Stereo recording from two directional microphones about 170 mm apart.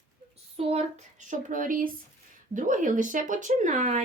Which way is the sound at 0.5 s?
35° right (ahead or behind).